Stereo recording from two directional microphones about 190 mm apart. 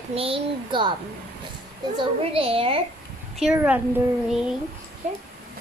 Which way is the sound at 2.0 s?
30° right (ahead or behind).